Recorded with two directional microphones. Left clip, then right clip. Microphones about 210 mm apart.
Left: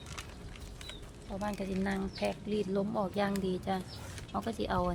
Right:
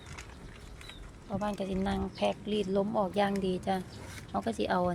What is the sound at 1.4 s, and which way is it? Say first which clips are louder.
Speech: right 3 dB; 10° right (ahead or behind).